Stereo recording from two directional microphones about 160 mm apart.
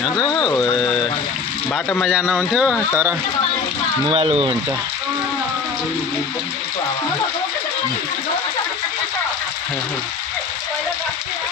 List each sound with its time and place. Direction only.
0.1 s speech: 25° left (ahead or behind)
1.7 s speech: 10° left (ahead or behind)
2.0 s speech: 10° right (ahead or behind)
4.1 s speech: 35° right (ahead or behind)